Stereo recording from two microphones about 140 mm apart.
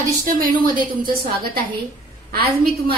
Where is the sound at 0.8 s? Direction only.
35° right (ahead or behind).